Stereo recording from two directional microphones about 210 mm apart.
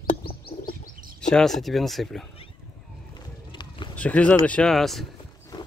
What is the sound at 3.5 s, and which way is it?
Run, 20° left (ahead or behind).